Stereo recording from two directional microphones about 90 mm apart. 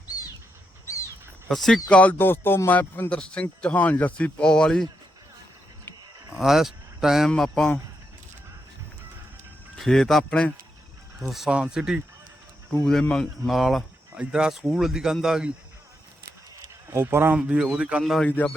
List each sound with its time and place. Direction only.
0.9 s a sound: 35° left (ahead or behind)
1.5 s speech: 5° left (ahead or behind)
1.9 s speech: 15° left (ahead or behind)
6.3 s speech: 5° right (ahead or behind)
9.7 s speech: 5° left (ahead or behind)
11.3 s speech: 5° right (ahead or behind)
12.8 s speech: 5° left (ahead or behind)
16.9 s speech: 25° right (ahead or behind)
17.5 s speech: 10° right (ahead or behind)
18.0 s speech: centre (ahead or behind)
18.3 s speech: 20° left (ahead or behind)